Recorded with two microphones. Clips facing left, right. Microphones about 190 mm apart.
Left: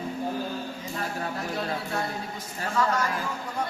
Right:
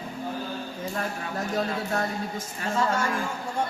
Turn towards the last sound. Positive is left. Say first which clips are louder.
# even
turn(degrees=-25)  # may be behind; listen again after turning